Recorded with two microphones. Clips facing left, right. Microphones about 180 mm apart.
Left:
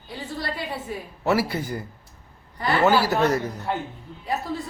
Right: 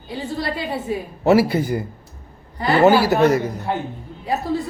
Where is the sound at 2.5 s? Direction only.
30° right (ahead or behind).